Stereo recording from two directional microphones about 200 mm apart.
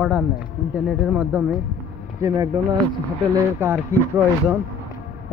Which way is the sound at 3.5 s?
10° right (ahead or behind).